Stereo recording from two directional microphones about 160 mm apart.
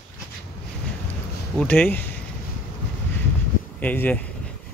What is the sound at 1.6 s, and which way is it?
Speech, 10° left (ahead or behind).